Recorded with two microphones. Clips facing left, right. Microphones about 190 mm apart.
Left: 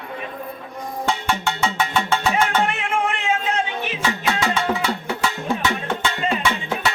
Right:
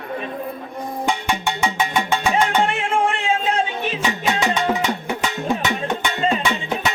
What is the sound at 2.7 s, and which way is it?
Music, 30° right (ahead or behind).